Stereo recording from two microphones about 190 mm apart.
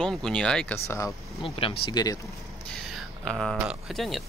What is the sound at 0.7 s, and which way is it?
Speech, 15° left (ahead or behind).